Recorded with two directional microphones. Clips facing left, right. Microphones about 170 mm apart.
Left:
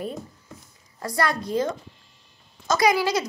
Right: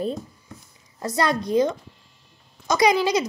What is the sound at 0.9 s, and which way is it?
Speech, 20° right (ahead or behind).